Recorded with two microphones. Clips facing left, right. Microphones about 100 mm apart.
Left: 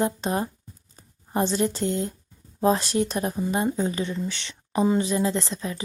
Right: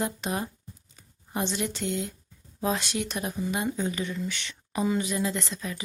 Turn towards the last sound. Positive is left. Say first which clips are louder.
# left 5 dB
turn(degrees=30)  # may be behind; listen again after turning